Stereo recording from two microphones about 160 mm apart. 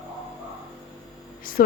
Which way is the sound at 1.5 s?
60° left (ahead or behind).